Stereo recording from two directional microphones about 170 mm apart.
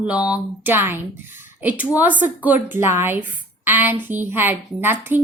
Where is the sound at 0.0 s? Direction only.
10° right (ahead or behind).